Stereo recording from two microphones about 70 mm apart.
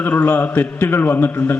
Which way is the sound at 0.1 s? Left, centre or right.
Left.